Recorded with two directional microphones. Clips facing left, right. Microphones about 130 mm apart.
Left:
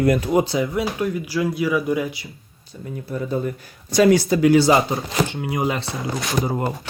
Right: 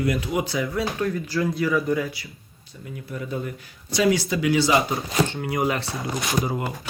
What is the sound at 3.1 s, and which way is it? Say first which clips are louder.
Speech: left 6 dB; 35° left (ahead or behind).